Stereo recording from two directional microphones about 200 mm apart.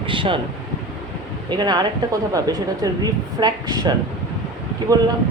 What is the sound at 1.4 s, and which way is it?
Speech, 20° right (ahead or behind).